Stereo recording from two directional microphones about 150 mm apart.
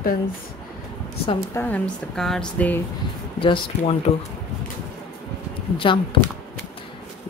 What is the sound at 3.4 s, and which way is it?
Speech, 35° left (ahead or behind).